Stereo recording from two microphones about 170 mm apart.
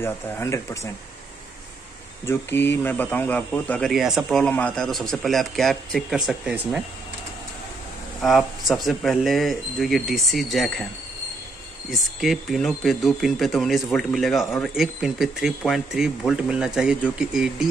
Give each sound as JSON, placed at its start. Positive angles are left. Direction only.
{"t": 0.0, "sound": "speech", "side_deg": 15}
{"t": 2.2, "sound": "speech", "side_deg": 10}
{"t": 3.9, "sound": "speech", "side_deg": 0}
{"t": 8.2, "sound": "speech", "side_deg": 0}
{"t": 11.9, "sound": "speech", "side_deg": 0}